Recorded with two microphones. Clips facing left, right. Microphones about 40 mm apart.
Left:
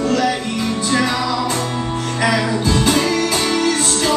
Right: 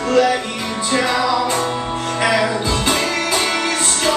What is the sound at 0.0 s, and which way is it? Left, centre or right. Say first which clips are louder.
Music: right 2 dB; centre.